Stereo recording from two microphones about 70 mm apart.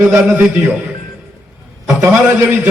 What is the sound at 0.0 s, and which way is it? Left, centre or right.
Speech, right.